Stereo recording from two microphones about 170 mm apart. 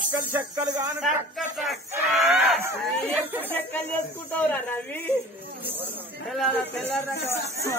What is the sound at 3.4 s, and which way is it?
Speech, 10° left (ahead or behind).